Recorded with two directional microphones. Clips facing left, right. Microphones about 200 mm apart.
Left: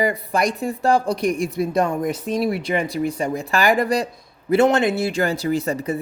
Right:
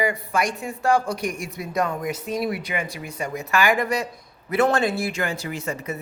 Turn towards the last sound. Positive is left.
turn(degrees=35)  # may be behind; listen again after turning